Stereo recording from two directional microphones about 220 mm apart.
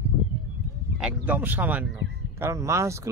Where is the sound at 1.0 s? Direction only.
10° right (ahead or behind).